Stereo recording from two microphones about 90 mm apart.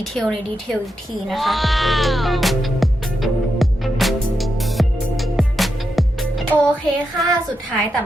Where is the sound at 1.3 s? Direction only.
Centre (ahead or behind).